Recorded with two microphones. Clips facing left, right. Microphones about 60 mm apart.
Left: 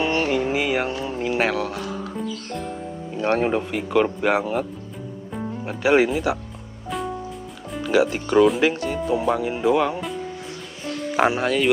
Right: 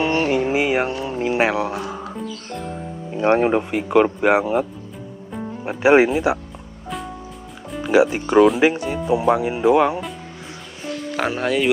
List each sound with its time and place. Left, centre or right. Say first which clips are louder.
0.0 s a sound: right 2 dB; centre
1.0 s speech: right 3 dB; centre
3.2 s speech: right 4 dB; centre
5.7 s speech: right 4 dB; right
7.8 s speech: right 4 dB; centre
11.1 s speech: left 4 dB; centre
11.4 s speech: right 1 dB; centre